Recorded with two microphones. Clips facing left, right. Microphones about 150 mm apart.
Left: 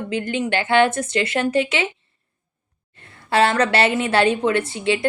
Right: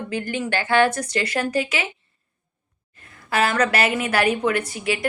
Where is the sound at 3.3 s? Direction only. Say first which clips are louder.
Left 3 dB; 30° left (ahead or behind).